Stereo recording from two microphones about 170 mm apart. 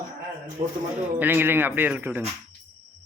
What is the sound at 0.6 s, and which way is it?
A man's voice, 20° right (ahead or behind).